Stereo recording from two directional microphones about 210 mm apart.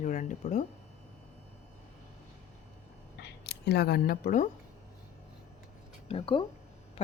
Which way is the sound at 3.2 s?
50° left (ahead or behind).